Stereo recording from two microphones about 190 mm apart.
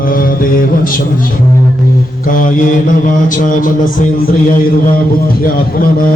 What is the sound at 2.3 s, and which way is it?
Mantra, 45° left (ahead or behind).